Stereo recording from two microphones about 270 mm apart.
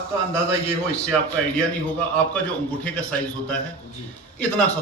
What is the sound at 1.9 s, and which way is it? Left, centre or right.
A man's voice, centre.